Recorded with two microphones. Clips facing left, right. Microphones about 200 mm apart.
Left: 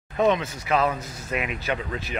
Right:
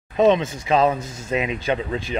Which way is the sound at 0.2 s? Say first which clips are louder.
Right 5 dB; 25° right (ahead or behind).